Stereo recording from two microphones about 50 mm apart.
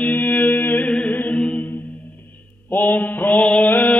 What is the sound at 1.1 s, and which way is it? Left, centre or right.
Music, left.